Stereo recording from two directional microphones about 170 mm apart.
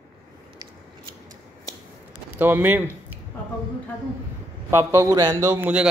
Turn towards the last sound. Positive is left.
turn(degrees=-10)  # may be behind; listen again after turning